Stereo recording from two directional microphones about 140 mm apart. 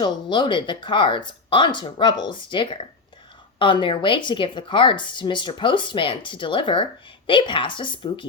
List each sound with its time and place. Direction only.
0.0 s speech: 35° left (ahead or behind)